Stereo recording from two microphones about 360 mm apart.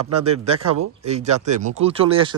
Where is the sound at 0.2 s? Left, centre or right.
Centre.